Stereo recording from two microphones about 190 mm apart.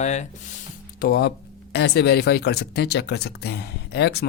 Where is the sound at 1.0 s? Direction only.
55° left (ahead or behind).